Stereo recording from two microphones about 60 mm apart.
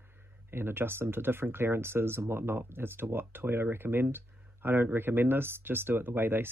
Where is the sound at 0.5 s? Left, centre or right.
Right.